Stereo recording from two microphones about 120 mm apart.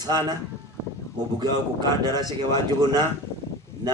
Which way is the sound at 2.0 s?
30° left (ahead or behind).